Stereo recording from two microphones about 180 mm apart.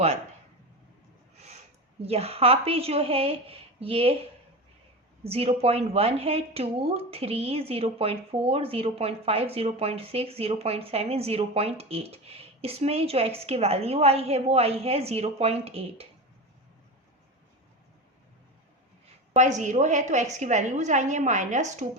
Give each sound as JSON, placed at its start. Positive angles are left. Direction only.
{"t": 2.0, "sound": "speech", "side_deg": -35}
{"t": 5.2, "sound": "speech", "side_deg": -35}
{"t": 19.4, "sound": "speech", "side_deg": -40}